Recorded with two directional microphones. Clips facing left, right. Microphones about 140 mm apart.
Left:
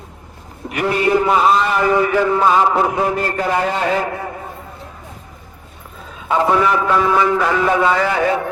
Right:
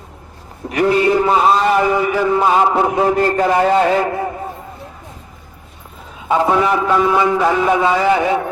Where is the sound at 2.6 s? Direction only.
25° right (ahead or behind).